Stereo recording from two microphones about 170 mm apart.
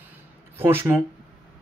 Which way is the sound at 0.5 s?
15° right (ahead or behind).